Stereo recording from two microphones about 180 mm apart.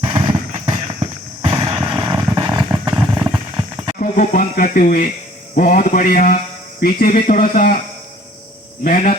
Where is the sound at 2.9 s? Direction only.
5° right (ahead or behind).